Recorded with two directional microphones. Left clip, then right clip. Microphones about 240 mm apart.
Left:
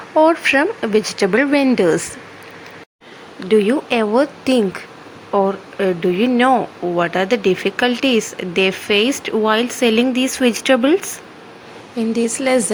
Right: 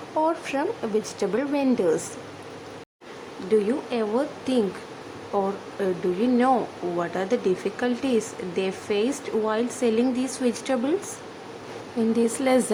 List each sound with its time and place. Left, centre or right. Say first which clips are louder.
0.2 s speech: left 12 dB; centre
3.5 s speech: left 8 dB; left
12.1 s speech: left 5 dB; centre